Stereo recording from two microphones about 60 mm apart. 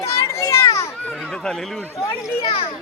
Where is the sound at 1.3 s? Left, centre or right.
Centre.